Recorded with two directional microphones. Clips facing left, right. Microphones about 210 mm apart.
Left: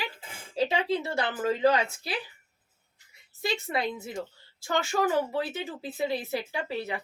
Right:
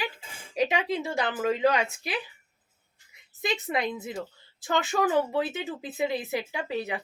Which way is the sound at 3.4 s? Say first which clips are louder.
Right 1 dB; 20° right (ahead or behind).